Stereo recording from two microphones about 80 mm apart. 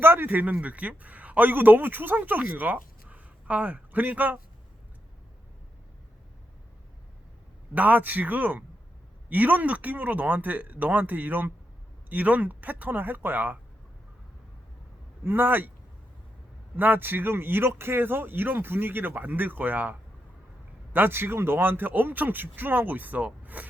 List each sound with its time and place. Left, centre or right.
0.0 s a man's voice: right
7.7 s speech: right
15.2 s speech: right
16.7 s speech: right